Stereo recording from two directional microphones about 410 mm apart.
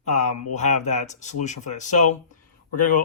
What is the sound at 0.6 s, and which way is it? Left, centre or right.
Speech, centre.